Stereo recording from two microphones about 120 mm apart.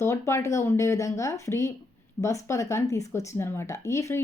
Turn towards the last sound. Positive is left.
turn(degrees=25)  # may be behind; listen again after turning